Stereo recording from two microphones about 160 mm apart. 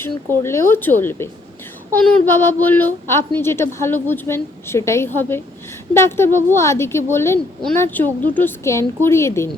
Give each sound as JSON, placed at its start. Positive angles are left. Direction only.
{"t": 0.3, "sound": "a child's voice", "side_deg": 15}